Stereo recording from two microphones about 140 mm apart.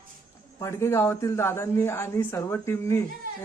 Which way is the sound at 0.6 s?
20° left (ahead or behind).